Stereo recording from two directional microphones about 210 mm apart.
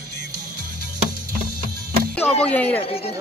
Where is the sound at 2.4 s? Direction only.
10° left (ahead or behind).